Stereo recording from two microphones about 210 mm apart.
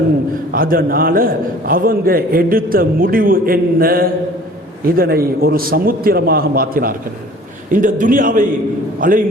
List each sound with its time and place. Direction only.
0.5 s a man's voice: 45° right (ahead or behind)